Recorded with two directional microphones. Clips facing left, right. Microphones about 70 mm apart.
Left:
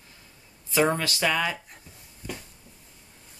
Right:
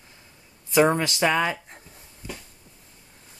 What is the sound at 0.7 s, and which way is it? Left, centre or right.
Speech, right.